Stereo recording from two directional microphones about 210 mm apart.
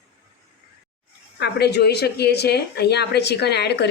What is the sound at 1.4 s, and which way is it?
Speech, 50° left (ahead or behind).